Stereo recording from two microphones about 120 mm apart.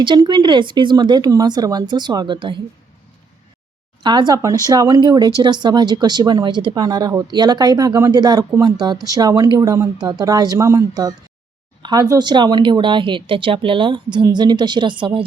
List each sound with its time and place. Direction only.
0.0 s speech: 40° right (ahead or behind)
4.0 s speech: 40° right (ahead or behind)
11.8 s a sound: 35° right (ahead or behind)
12.0 s speech: 35° right (ahead or behind)